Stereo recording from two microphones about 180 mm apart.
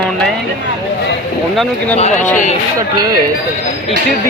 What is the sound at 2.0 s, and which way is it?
Speech, 40° left (ahead or behind).